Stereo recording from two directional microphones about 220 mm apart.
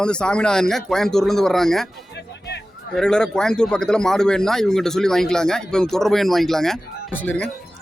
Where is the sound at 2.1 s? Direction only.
50° left (ahead or behind).